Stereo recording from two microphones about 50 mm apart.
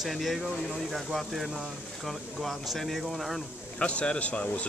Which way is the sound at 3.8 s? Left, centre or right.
Left.